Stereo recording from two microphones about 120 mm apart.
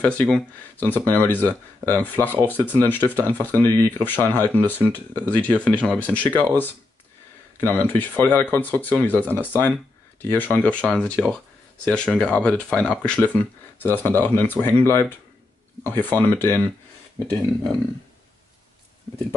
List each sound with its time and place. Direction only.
0.0 s speech: 10° left (ahead or behind)